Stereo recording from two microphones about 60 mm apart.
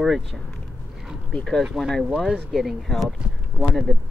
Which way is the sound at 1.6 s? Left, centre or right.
Centre.